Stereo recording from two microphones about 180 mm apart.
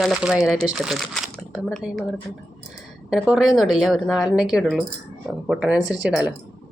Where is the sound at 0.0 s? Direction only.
5° right (ahead or behind).